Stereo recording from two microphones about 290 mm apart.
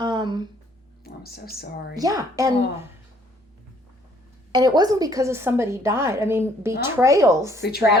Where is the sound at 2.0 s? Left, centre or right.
Centre.